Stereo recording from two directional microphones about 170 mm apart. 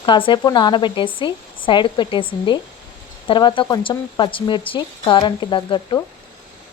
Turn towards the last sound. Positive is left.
turn(degrees=30)  # may be behind; listen again after turning